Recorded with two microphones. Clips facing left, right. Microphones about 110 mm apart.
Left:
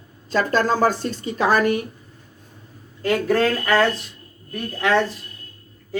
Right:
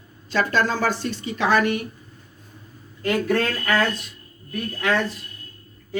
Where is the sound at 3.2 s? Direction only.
30° left (ahead or behind).